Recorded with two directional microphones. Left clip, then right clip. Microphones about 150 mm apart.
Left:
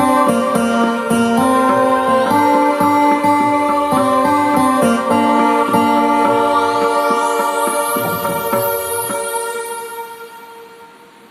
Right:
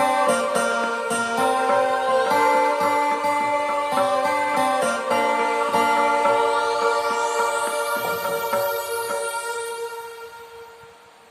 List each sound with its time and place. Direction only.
0.0 s music: 25° left (ahead or behind)